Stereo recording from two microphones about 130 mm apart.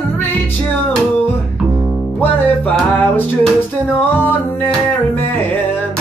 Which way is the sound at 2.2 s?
15° left (ahead or behind).